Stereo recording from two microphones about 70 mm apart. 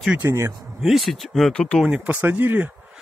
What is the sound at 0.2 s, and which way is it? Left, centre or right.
Speech, right.